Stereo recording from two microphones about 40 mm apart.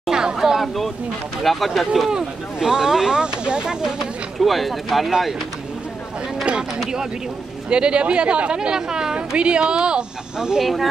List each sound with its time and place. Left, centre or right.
0.1 s a sound: centre
0.6 s speech: centre
2.0 s speech: centre
3.8 s speech: centre
7.7 s speech: right
10.6 s speech: centre